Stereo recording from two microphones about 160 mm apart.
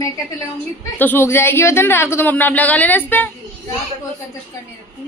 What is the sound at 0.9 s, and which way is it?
A woman's voice, 15° left (ahead or behind).